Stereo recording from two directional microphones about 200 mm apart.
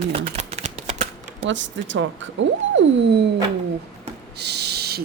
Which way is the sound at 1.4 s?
65° right (ahead or behind).